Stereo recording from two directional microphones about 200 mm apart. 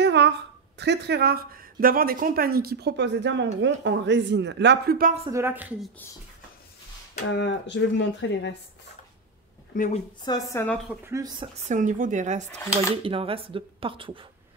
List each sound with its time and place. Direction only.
0.0 s a sound: 55° right (ahead or behind)
0.7 s speech: 55° right (ahead or behind)
5.3 s a woman's voice: 10° right (ahead or behind)
7.3 s speech: 60° left (ahead or behind)
9.7 s speech: 40° left (ahead or behind)
10.2 s a woman's voice: 15° left (ahead or behind)
11.1 s a woman's voice: 20° right (ahead or behind)
11.6 s speech: 40° right (ahead or behind)